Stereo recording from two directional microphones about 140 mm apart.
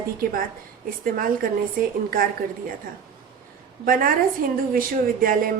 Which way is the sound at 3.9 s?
90° right.